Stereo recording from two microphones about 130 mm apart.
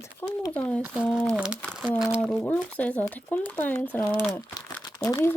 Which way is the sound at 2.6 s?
10° left (ahead or behind).